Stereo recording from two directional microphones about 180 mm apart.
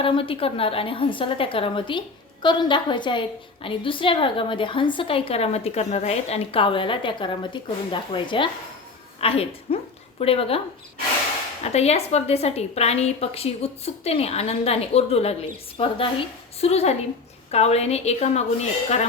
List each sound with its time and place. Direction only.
0.0 s a woman's voice: 30° left (ahead or behind)
11.6 s a woman's voice: 35° left (ahead or behind)